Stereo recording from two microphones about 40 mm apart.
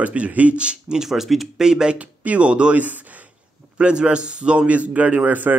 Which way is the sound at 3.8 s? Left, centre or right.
Right.